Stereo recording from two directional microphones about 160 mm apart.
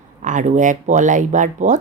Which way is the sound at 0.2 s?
50° right (ahead or behind).